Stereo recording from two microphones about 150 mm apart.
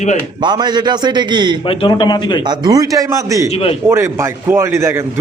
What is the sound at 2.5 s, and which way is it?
A man's voice, 25° right (ahead or behind).